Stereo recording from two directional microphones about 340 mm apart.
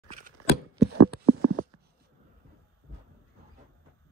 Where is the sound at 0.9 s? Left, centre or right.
Right.